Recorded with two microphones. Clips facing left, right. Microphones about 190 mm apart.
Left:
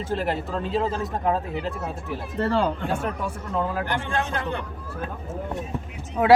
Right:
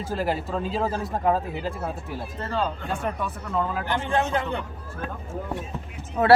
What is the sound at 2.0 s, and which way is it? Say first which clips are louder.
Speech: left 6 dB; 65° left (ahead or behind).